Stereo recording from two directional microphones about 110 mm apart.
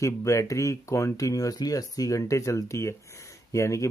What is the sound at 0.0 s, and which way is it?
Speech, 30° left (ahead or behind).